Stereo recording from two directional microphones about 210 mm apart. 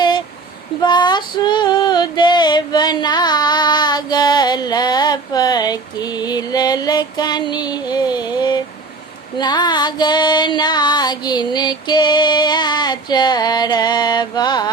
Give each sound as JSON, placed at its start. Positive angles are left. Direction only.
{"t": 0.8, "sound": "female singing", "side_deg": 20}